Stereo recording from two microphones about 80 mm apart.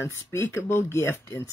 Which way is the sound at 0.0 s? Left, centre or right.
Left.